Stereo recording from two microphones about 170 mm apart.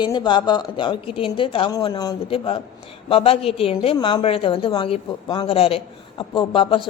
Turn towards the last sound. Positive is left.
turn(degrees=30)  # may be behind; listen again after turning